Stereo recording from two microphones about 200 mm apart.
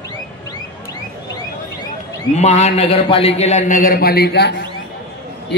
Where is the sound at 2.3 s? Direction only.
35° left (ahead or behind); by 4.6 s 55° left (ahead or behind).